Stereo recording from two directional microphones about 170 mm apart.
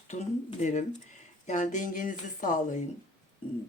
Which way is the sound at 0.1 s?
45° left (ahead or behind).